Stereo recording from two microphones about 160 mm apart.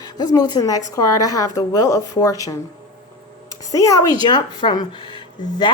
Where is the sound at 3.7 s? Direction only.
20° left (ahead or behind).